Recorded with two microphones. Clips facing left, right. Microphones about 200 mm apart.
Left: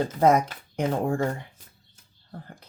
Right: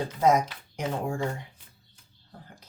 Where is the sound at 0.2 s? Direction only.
55° left (ahead or behind).